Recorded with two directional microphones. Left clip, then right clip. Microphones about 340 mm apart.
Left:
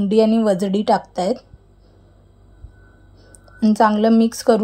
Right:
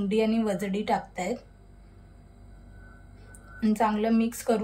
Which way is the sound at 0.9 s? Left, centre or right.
Left.